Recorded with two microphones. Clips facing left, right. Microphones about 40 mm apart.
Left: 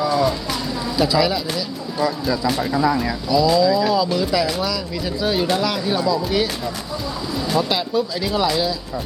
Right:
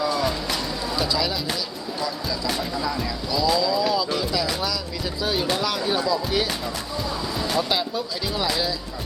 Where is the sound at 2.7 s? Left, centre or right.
Left.